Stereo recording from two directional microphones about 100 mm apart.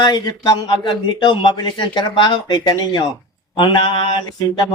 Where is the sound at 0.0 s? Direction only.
45° left (ahead or behind).